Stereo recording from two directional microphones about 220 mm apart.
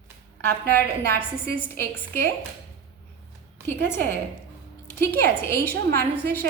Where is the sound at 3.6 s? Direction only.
10° left (ahead or behind).